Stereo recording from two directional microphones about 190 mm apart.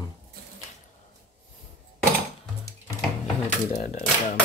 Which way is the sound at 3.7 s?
40° left (ahead or behind).